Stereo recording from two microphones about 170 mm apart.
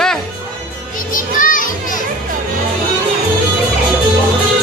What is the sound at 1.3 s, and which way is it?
Children playing, 55° left (ahead or behind).